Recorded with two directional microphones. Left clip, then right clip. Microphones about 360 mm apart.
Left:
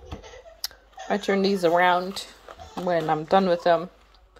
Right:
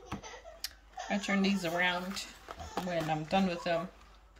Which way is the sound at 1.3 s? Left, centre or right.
Left.